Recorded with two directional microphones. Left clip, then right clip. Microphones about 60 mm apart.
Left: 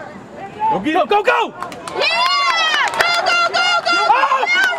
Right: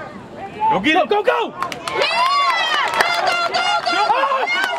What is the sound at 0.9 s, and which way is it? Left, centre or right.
Speech, left.